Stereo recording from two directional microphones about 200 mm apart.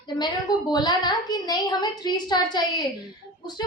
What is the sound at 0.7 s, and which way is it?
A woman's voice, 20° left (ahead or behind).